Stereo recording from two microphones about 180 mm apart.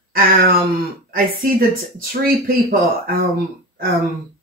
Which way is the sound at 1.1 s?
55° right (ahead or behind).